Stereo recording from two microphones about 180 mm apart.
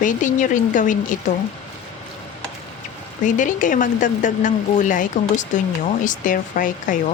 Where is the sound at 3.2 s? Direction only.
45° left (ahead or behind).